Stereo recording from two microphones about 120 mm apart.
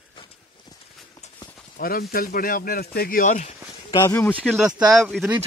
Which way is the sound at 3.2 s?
90° left.